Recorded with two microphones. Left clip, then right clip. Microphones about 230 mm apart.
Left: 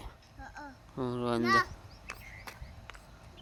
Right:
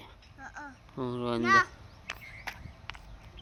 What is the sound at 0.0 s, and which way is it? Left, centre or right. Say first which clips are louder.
Babbling: right 2 dB; centre.